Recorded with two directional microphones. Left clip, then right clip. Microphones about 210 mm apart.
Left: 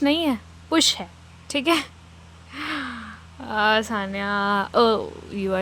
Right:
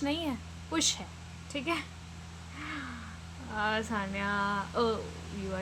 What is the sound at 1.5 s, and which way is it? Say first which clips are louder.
Speech: left 12 dB; 55° left (ahead or behind).